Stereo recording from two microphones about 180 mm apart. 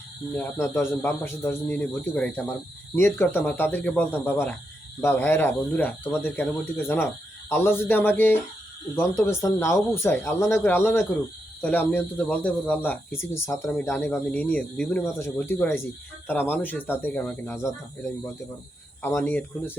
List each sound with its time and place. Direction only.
0.3 s speech: 10° left (ahead or behind)
19.0 s speech: 10° left (ahead or behind)